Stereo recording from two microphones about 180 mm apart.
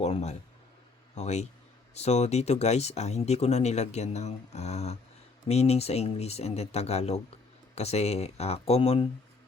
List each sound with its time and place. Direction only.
0.0 s speech: 40° left (ahead or behind)